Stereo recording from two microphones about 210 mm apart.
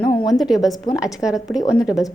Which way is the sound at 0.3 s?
Centre (ahead or behind).